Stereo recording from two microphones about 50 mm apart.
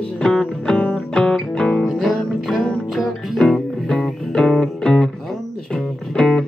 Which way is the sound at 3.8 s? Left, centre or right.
Centre.